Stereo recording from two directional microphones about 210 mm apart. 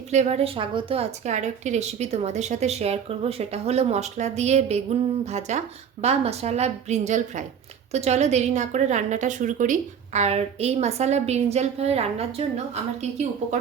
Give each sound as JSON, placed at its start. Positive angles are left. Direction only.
{"t": 0.1, "sound": "a woman's voice", "side_deg": -30}